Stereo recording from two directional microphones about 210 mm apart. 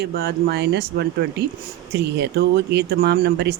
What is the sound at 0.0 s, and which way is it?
Speech, 50° right (ahead or behind).